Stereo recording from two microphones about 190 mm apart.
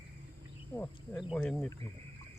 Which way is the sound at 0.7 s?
10° left (ahead or behind).